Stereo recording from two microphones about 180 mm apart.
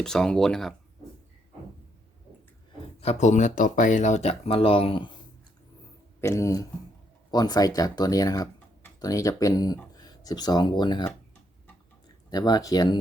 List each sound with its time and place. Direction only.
0.0 s speech: 5° left (ahead or behind)
3.0 s speech: 40° left (ahead or behind)
6.1 s speech: 15° left (ahead or behind)
12.3 s speech: 20° left (ahead or behind)